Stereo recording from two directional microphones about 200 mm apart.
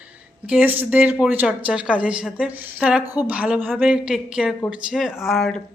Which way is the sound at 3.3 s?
5° right (ahead or behind).